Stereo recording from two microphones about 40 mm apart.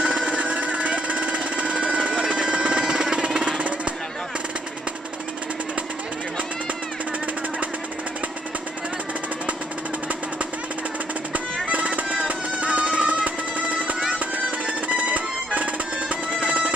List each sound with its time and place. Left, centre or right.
0.0 s a sound: right
2.0 s jackhammer: right
11.7 s music: right